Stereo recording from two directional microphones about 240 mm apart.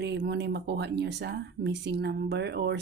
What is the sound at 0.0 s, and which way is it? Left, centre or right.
Speech, right.